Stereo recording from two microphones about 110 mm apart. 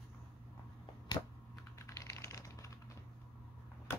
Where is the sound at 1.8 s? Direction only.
25° left (ahead or behind).